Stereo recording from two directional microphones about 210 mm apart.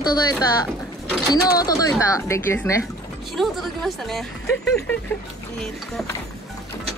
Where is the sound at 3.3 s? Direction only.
Centre (ahead or behind).